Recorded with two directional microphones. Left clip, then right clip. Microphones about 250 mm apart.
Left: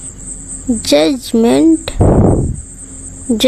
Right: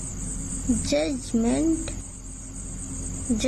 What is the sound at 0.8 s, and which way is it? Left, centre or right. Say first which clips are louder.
Speech: left 16 dB; left.